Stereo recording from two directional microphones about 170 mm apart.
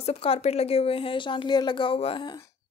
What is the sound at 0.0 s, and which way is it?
A woman's voice, 35° left (ahead or behind).